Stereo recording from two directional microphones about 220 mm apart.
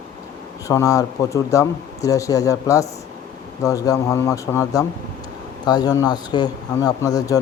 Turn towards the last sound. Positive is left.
turn(degrees=15)  # may be behind; listen again after turning